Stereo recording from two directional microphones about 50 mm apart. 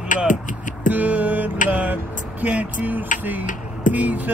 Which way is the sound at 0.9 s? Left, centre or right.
Right.